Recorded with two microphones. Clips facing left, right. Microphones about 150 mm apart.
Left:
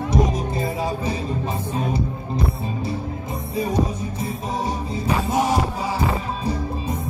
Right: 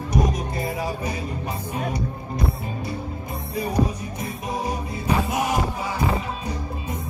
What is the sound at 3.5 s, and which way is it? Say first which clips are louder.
Music: left 1 dB; 25° left (ahead or behind).